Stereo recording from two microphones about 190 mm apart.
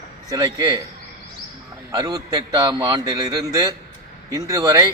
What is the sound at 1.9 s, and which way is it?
A man's voice, 20° right (ahead or behind).